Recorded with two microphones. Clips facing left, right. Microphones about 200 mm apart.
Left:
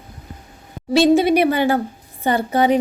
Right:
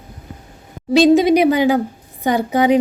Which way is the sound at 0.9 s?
15° right (ahead or behind).